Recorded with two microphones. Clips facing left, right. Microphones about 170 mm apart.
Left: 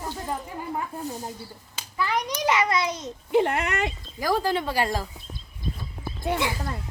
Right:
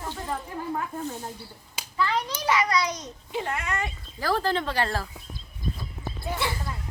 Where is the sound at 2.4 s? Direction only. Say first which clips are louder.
Left 1 dB; 25° left (ahead or behind).